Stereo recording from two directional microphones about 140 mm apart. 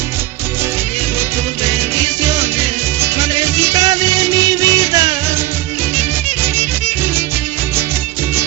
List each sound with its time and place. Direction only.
3.6 s music: 25° right (ahead or behind)